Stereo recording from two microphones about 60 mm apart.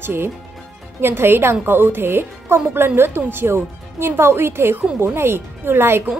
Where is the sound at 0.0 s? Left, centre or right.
Right.